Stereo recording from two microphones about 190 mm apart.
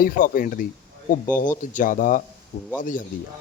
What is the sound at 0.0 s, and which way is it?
A man's voice, 45° left (ahead or behind).